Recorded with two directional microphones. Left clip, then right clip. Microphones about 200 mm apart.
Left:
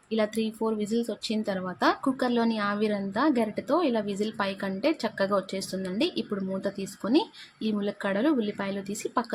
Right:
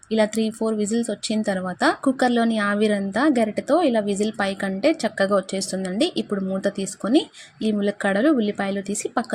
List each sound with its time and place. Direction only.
0.1 s a woman's voice: 20° right (ahead or behind)